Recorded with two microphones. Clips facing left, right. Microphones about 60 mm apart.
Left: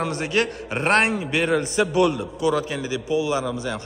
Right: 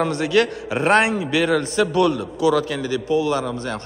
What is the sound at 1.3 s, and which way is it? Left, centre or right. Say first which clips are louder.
A man's voice: right 2 dB; centre.